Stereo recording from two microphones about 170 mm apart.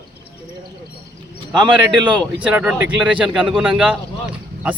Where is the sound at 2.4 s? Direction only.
10° right (ahead or behind).